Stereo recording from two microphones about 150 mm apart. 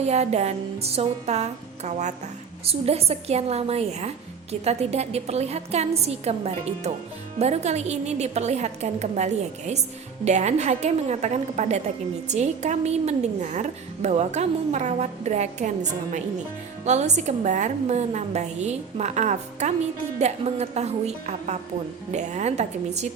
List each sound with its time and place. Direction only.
0.0 s a woman's voice: 45° right (ahead or behind)